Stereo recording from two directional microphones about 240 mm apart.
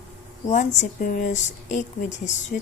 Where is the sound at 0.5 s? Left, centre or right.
Left.